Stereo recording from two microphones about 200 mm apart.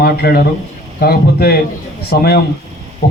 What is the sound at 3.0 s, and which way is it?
Owl, 45° left (ahead or behind).